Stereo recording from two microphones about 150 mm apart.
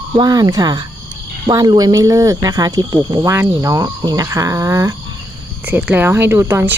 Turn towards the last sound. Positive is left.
turn(degrees=-15)  # may be behind; listen again after turning